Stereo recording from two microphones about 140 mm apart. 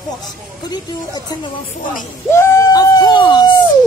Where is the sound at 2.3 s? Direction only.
20° left (ahead or behind).